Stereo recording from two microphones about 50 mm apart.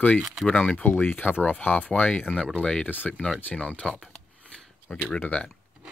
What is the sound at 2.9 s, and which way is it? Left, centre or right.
Speech, left.